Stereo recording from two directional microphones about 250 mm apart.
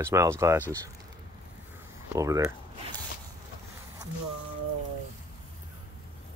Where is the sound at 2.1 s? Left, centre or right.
Centre.